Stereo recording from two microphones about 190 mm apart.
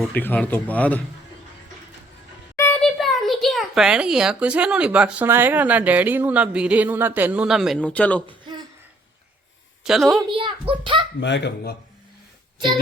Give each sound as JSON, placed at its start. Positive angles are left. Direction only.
{"t": 0.1, "sound": "speech", "side_deg": 10}
{"t": 2.6, "sound": "a child's voice", "side_deg": 10}
{"t": 8.3, "sound": "a sound", "side_deg": -25}
{"t": 9.8, "sound": "a woman's voice", "side_deg": 0}
{"t": 10.3, "sound": "a child's voice", "side_deg": -25}
{"t": 11.2, "sound": "speech", "side_deg": 65}